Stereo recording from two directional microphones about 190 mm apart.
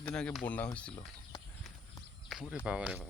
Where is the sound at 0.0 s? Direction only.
5° left (ahead or behind).